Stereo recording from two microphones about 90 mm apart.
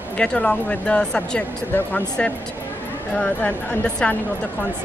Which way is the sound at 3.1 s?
15° left (ahead or behind).